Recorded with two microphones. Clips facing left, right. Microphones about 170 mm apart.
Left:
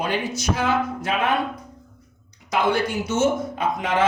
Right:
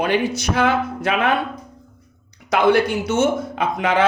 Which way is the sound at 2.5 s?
65° right (ahead or behind).